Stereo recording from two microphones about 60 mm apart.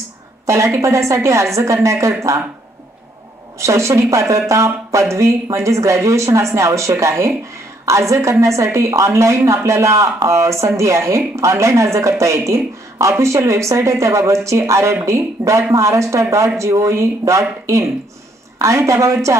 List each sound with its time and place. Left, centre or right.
0.5 s a woman's voice: right
3.5 s a woman's voice: right